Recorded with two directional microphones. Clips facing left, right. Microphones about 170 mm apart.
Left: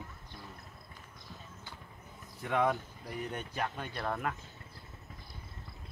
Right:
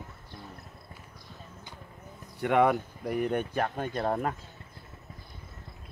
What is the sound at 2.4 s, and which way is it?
Speech, 70° right (ahead or behind).